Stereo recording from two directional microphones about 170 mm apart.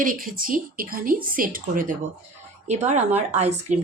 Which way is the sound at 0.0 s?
55° right (ahead or behind).